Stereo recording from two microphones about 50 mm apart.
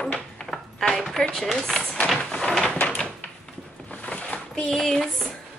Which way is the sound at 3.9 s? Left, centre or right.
Left.